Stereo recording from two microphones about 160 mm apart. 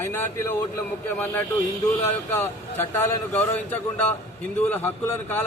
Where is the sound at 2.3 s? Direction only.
10° left (ahead or behind).